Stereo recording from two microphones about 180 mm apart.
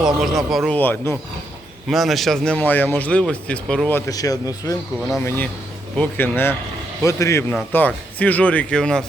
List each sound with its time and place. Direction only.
0.0 s speech: centre (ahead or behind)
0.8 s speech: 10° left (ahead or behind)
6.0 s speech: 10° left (ahead or behind)